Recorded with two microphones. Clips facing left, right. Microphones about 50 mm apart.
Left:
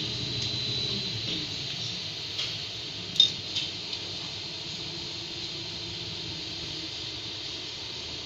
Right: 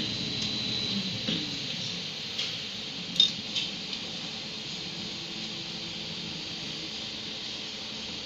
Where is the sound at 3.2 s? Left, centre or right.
Right.